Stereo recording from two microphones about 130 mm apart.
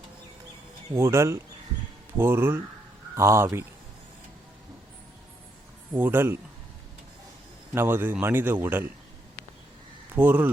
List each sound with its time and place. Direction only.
0.9 s speech: 20° right (ahead or behind)
5.9 s speech: 15° right (ahead or behind)
7.7 s speech: 20° right (ahead or behind)
10.2 s speech: 15° right (ahead or behind)